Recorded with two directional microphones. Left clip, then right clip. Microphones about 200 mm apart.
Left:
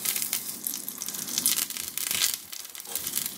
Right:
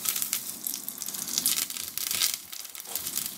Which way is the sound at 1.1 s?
5° left (ahead or behind).